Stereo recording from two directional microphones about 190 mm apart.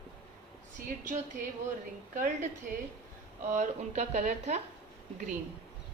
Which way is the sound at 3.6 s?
40° right (ahead or behind).